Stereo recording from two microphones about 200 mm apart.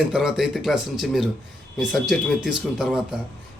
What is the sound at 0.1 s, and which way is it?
A man's voice, centre (ahead or behind).